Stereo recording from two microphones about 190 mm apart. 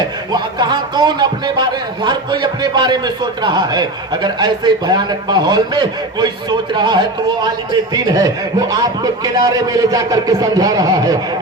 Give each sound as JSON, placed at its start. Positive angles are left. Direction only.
{"t": 0.3, "sound": "a man's voice", "side_deg": -20}
{"t": 8.1, "sound": "a man's voice", "side_deg": -20}